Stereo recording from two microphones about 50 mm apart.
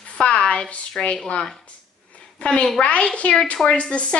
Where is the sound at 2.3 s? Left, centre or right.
Left.